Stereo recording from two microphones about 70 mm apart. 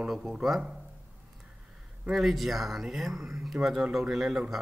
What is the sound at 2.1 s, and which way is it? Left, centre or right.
Speech, centre.